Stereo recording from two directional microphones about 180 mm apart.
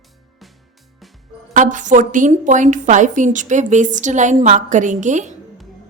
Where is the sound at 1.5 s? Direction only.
45° right (ahead or behind).